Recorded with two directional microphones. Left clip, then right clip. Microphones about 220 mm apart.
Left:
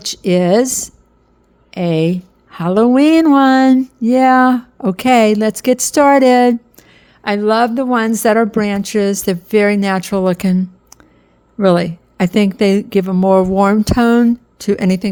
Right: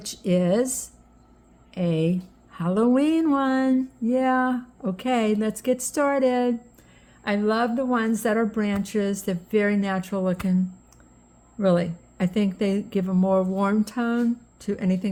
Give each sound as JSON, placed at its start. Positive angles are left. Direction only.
{"t": 0.0, "sound": "a woman's voice", "side_deg": 45}